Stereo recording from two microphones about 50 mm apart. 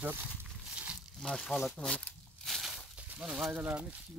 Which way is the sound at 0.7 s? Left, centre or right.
Right.